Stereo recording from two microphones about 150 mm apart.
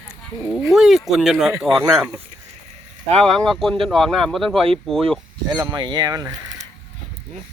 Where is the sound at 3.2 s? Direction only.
5° left (ahead or behind).